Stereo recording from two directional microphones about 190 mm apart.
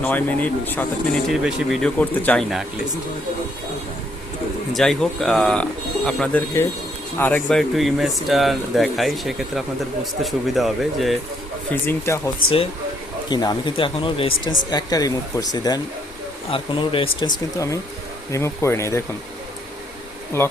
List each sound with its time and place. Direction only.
0.0 s speech: 10° left (ahead or behind)
1.3 s speech: centre (ahead or behind)
4.7 s speech: 5° left (ahead or behind)
11.9 s speech: 15° left (ahead or behind)
13.3 s speech: 20° left (ahead or behind)